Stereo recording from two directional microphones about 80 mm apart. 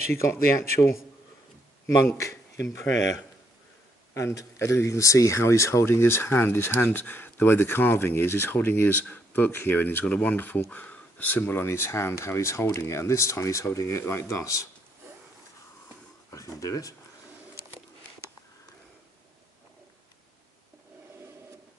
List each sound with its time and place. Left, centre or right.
0.2 s speech: left
2.1 s speech: left
4.1 s speech: left
16.3 s speech: left